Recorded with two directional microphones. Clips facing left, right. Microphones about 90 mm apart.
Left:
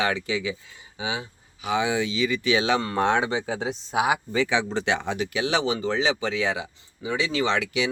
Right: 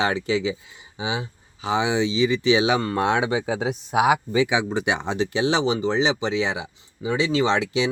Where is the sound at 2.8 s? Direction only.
5° right (ahead or behind); by 7.9 s 25° right (ahead or behind).